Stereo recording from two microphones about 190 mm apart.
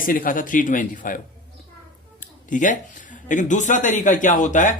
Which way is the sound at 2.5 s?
40° left (ahead or behind).